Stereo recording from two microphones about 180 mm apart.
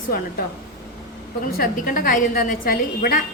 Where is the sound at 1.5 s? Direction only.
55° left (ahead or behind).